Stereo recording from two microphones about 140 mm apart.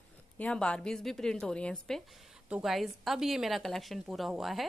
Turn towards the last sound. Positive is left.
turn(degrees=0)  # may be behind; listen again after turning